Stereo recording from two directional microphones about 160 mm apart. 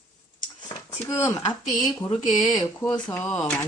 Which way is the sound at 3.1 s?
15° left (ahead or behind).